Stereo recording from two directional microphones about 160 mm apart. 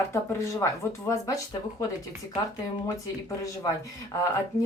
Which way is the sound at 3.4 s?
20° left (ahead or behind).